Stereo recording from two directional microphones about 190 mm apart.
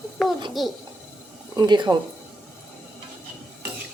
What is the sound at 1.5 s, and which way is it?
Speech, 20° right (ahead or behind).